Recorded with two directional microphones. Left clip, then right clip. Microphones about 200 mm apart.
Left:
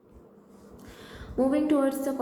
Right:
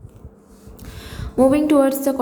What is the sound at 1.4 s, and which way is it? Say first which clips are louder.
Speech: right 10 dB; 30° right (ahead or behind).